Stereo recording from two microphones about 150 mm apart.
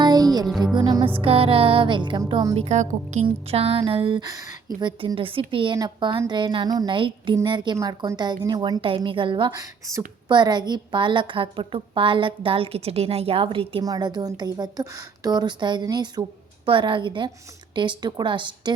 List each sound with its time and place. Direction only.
0.0 s music: 25° right (ahead or behind)
1.2 s a woman's voice: 40° right (ahead or behind)
2.6 s a woman's voice: 50° right (ahead or behind); by 18.7 s 30° right (ahead or behind)